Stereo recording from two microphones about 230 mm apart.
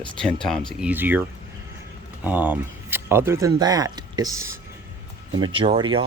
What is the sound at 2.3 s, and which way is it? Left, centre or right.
Speech, centre.